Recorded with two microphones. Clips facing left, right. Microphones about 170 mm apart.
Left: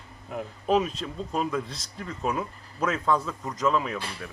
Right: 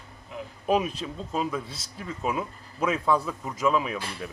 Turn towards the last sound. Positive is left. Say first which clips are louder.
# right 1 dB
turn(degrees=-10)  # may be behind; listen again after turning